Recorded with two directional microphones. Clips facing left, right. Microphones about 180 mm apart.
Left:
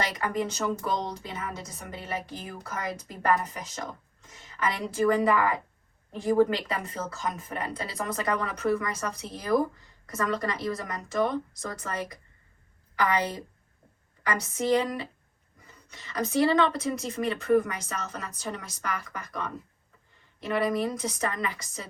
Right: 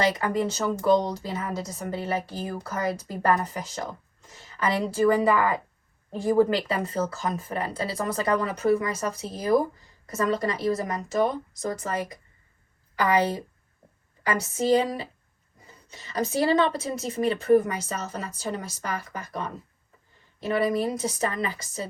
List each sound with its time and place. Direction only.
0.0 s a woman's voice: 30° right (ahead or behind)